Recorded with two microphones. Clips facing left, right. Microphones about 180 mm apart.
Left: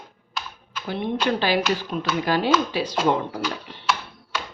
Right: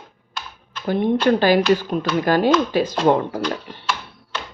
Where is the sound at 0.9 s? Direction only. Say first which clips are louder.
Right 7 dB; 45° right (ahead or behind).